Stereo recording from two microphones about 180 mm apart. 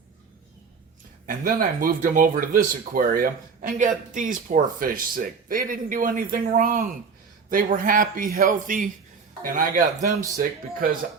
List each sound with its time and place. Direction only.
1.3 s speech: 50° right (ahead or behind)